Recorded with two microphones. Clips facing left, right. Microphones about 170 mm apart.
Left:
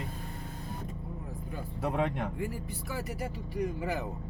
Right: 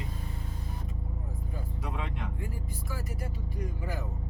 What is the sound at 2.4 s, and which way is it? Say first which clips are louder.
Speech: left 4 dB; 70° left (ahead or behind).